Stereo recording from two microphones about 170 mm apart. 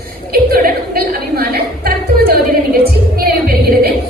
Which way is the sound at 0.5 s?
60° right (ahead or behind).